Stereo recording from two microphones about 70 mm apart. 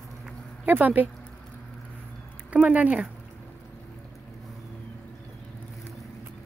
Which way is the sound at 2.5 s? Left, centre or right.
Centre.